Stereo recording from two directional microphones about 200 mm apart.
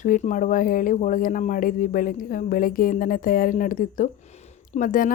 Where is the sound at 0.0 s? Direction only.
40° left (ahead or behind).